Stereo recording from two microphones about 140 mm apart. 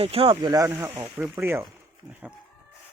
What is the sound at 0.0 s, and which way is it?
Speech, 40° right (ahead or behind).